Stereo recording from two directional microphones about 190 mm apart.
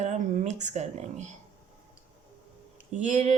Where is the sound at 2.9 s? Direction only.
40° right (ahead or behind).